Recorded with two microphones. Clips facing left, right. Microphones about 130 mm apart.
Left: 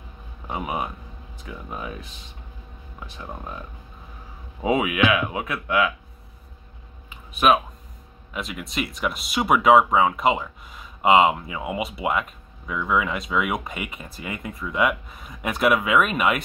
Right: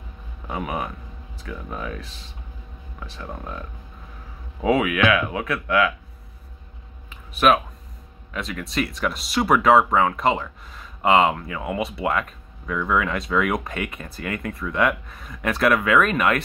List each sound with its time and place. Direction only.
0.5 s speech: 15° left (ahead or behind)
4.6 s speech: 20° left (ahead or behind)
7.3 s speech: 15° left (ahead or behind)